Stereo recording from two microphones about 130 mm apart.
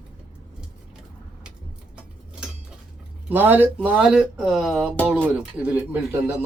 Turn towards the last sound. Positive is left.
turn(degrees=-15)  # may be behind; listen again after turning